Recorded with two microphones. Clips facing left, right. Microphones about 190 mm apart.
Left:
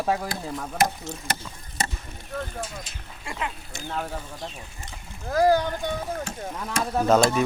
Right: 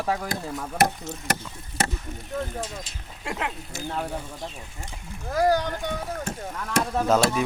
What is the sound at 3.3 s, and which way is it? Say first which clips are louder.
Speech: right 2 dB; 65° right (ahead or behind).